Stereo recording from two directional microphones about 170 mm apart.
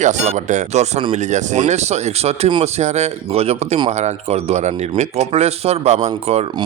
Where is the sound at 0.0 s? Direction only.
45° right (ahead or behind).